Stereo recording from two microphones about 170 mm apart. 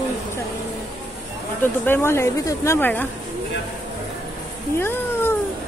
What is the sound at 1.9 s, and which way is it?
Speech, 15° left (ahead or behind).